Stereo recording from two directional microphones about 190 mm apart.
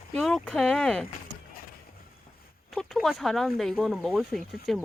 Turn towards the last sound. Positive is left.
turn(degrees=0)  # may be behind; listen again after turning